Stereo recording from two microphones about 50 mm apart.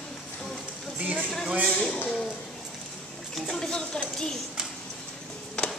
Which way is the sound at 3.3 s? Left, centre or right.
Centre.